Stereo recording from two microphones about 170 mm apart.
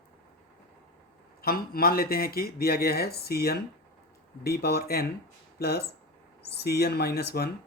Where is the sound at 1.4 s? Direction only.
60° left (ahead or behind).